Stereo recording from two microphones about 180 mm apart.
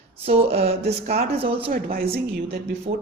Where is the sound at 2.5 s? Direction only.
65° right (ahead or behind).